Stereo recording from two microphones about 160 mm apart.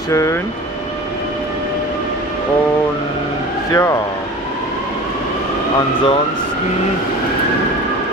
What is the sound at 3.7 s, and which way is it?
Speech, 20° left (ahead or behind).